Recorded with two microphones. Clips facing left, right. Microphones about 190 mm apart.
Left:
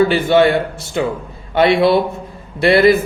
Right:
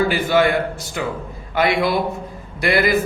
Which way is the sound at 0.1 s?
25° left (ahead or behind).